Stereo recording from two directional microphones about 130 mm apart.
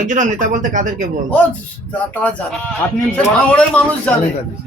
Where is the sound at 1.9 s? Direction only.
10° left (ahead or behind).